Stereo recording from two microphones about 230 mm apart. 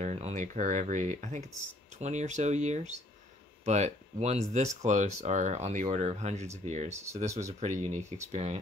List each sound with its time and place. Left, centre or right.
0.0 s speech: right